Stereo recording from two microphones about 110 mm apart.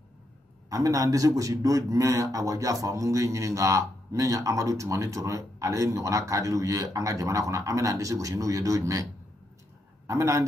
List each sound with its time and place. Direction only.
0.7 s a man's voice: 30° right (ahead or behind)
10.0 s a man's voice: 25° right (ahead or behind)